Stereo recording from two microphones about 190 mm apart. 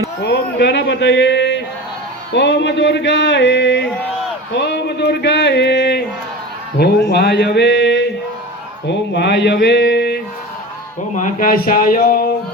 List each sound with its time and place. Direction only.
0.2 s a man's voice: 60° left (ahead or behind)
11.1 s speech: 40° left (ahead or behind)